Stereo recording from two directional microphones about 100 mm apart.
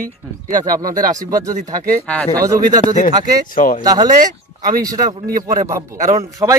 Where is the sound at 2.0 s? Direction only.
15° left (ahead or behind).